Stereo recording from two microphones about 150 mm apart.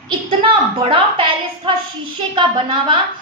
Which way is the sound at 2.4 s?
35° right (ahead or behind).